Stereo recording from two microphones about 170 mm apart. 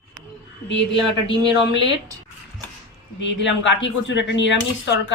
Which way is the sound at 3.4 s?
90° left.